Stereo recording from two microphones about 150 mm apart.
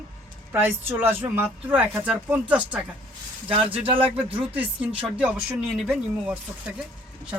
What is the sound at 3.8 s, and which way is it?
Speech, 35° right (ahead or behind).